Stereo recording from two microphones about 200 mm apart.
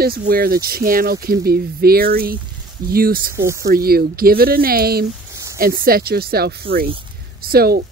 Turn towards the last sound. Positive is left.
turn(degrees=-50)  # may be behind; listen again after turning